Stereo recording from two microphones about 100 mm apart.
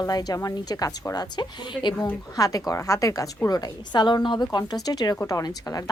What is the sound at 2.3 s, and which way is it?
A woman's voice, 35° left (ahead or behind).